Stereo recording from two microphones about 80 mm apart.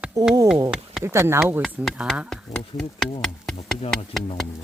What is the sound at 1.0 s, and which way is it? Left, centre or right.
Speech, right.